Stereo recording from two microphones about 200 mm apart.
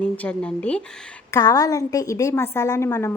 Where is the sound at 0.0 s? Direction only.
5° left (ahead or behind).